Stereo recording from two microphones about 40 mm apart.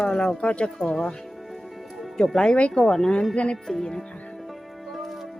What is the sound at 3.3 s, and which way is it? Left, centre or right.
Speech, left.